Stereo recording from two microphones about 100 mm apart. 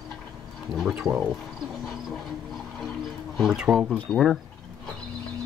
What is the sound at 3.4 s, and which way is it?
Speech, 5° right (ahead or behind).